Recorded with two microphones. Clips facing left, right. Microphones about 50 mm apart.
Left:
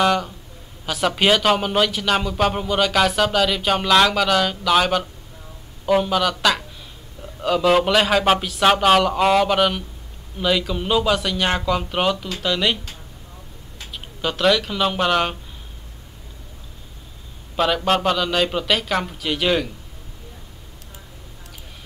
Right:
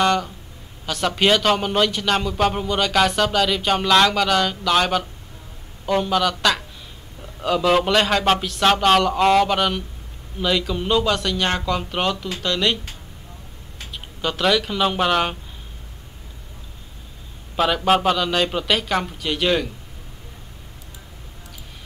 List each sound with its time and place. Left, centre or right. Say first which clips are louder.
0.0 s a man's voice: even; centre
13.9 s speech: even; centre
17.6 s a man's voice: right 1 dB; centre